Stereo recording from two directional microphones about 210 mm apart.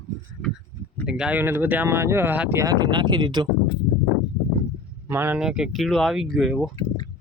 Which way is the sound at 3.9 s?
25° left (ahead or behind).